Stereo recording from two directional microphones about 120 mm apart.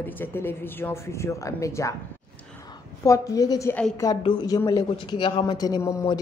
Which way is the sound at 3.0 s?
30° left (ahead or behind).